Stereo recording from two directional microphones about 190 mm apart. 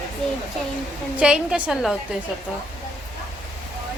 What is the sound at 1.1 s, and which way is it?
Speech, 5° right (ahead or behind).